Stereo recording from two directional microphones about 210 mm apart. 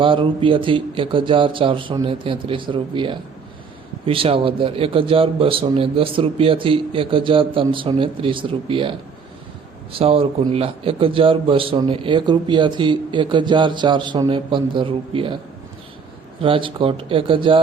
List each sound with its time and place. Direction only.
0.0 s a man's voice: 25° right (ahead or behind)
10.0 s a man's voice: 30° right (ahead or behind)
16.4 s a man's voice: 25° right (ahead or behind)